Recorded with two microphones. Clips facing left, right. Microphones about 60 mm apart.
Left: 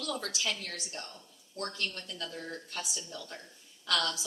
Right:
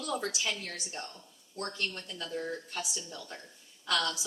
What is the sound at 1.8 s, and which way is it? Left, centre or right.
Speech, centre.